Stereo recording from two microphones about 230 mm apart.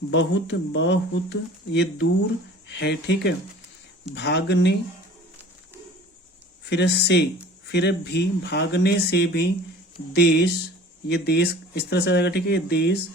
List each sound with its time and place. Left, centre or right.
0.1 s speech: left
6.7 s speech: left